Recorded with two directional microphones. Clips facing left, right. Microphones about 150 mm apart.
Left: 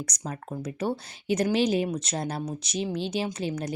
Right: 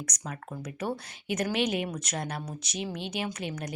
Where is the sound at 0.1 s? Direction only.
30° left (ahead or behind).